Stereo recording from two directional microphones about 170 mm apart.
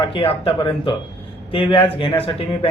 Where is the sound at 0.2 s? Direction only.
35° left (ahead or behind).